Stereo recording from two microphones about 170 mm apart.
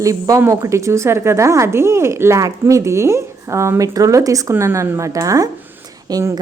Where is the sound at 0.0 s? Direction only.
20° right (ahead or behind).